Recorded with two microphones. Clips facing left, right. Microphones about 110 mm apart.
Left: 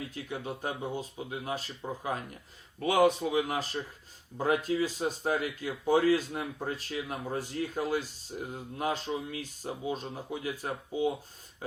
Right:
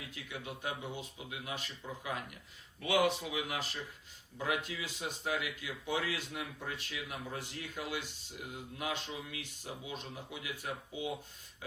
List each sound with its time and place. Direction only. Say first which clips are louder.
0.1 s speech: left 7 dB; 40° left (ahead or behind)